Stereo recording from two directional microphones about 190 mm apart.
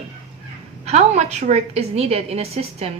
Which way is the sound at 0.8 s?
35° right (ahead or behind).